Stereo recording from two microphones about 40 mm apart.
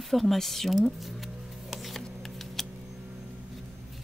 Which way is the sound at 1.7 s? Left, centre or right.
Centre.